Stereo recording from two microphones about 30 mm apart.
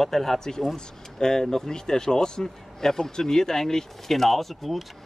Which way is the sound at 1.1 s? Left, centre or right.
Centre.